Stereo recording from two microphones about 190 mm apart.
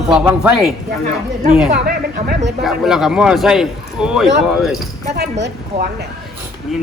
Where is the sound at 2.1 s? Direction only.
45° right (ahead or behind).